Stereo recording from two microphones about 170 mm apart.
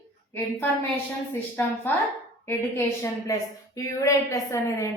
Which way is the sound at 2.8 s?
15° left (ahead or behind).